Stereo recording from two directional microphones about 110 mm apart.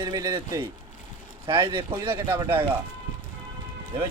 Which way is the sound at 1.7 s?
50° right (ahead or behind).